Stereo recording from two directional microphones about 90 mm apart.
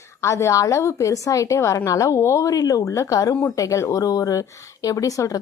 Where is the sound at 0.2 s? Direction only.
30° left (ahead or behind).